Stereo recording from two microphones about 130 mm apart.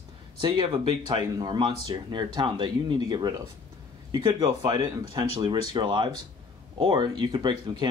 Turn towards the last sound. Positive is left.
turn(degrees=-35)  # may be behind; listen again after turning